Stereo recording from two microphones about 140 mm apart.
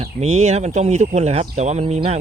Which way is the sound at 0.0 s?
50° right (ahead or behind).